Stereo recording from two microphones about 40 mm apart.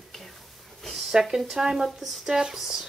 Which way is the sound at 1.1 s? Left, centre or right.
Centre.